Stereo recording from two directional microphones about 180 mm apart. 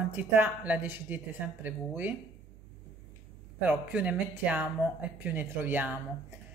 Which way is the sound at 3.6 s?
10° right (ahead or behind).